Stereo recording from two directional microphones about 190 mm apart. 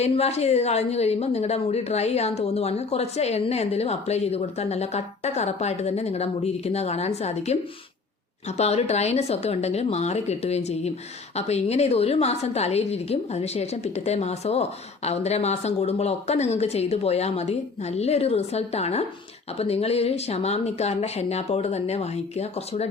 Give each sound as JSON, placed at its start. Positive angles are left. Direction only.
{"t": 0.0, "sound": "a woman's voice", "side_deg": 35}